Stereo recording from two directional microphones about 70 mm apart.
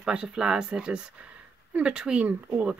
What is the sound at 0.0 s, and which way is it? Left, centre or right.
Speech, centre.